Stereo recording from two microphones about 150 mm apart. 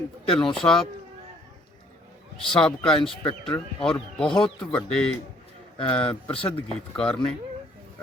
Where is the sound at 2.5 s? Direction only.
5° left (ahead or behind).